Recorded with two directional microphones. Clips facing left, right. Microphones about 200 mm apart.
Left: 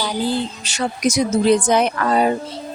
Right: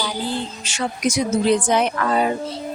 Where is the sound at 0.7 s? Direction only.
40° left (ahead or behind).